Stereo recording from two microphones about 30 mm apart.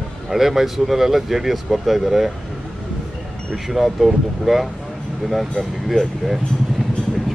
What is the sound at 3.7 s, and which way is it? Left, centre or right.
Speech, centre.